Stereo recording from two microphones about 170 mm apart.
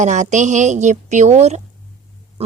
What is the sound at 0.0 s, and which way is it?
A woman's voice, 45° right (ahead or behind).